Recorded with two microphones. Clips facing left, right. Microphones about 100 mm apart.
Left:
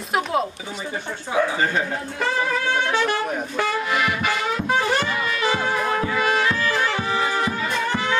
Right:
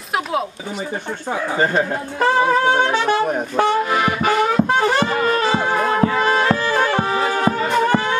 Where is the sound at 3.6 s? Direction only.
35° right (ahead or behind).